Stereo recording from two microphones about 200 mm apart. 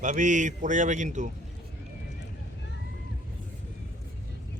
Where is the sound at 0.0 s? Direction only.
40° right (ahead or behind).